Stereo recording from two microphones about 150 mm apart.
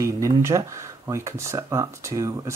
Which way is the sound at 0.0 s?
20° right (ahead or behind).